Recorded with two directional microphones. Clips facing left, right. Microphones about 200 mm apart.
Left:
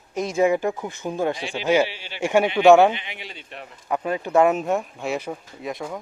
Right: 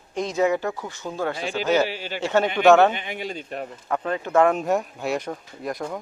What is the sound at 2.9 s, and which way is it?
Speech, 45° right (ahead or behind).